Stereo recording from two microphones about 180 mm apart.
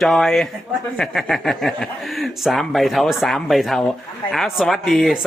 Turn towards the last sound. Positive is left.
turn(degrees=0)  # may be behind; listen again after turning